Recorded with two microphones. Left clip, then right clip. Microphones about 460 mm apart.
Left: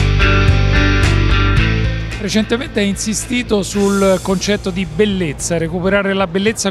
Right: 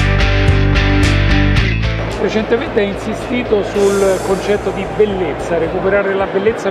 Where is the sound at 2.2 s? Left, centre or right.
Left.